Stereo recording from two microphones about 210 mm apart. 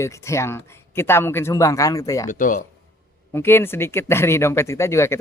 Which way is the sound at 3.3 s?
10° left (ahead or behind).